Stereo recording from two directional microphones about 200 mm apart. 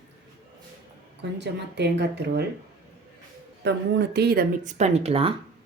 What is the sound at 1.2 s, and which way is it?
Speech, 60° right (ahead or behind).